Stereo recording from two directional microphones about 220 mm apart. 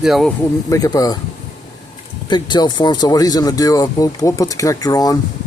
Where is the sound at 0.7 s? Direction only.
15° left (ahead or behind).